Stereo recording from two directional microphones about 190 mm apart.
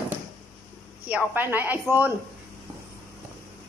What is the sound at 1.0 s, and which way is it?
Speech, 10° right (ahead or behind).